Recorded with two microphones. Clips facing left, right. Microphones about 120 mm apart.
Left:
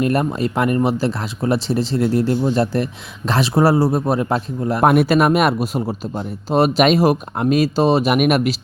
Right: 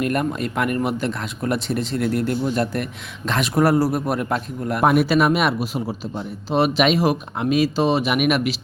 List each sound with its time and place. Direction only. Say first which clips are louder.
0.0 s speech: left 4 dB; 35° left (ahead or behind)
4.9 s speech: left 2 dB; 50° left (ahead or behind)